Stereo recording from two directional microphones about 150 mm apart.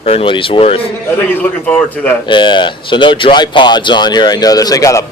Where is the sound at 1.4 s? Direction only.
10° left (ahead or behind).